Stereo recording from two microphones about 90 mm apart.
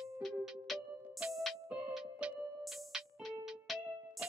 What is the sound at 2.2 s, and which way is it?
Music, 10° right (ahead or behind).